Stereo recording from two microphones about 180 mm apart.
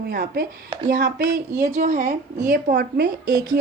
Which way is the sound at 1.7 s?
45° right (ahead or behind).